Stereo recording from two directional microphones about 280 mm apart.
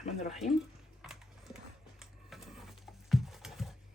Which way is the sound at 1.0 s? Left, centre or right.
Centre.